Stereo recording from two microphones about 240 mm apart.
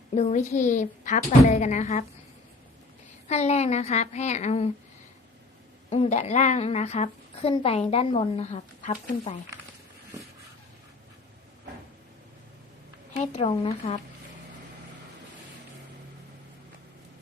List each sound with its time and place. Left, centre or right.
0.1 s speech: left
3.2 s speech: left
5.9 s speech: left
13.1 s speech: left